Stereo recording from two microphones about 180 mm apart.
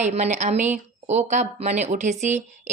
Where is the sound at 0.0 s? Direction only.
40° right (ahead or behind).